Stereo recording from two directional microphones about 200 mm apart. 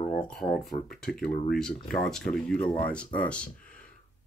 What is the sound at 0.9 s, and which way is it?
Speech, 5° left (ahead or behind).